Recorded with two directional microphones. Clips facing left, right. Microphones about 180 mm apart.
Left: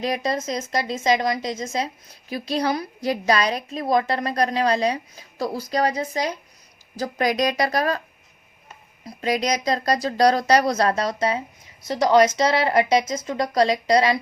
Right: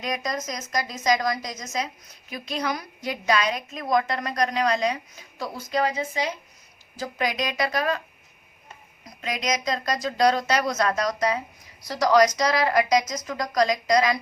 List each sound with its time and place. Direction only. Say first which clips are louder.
0.0 s a woman's voice: left 5 dB; 30° left (ahead or behind)
9.0 s speech: left 5 dB; 35° left (ahead or behind)